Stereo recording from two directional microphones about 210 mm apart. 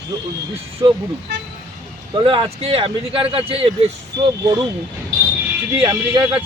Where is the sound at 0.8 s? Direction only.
20° right (ahead or behind).